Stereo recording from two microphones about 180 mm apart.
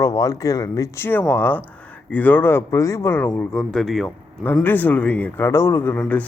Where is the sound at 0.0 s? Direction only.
20° left (ahead or behind).